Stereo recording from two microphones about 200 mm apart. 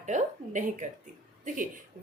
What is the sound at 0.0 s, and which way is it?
A woman's voice, 35° right (ahead or behind).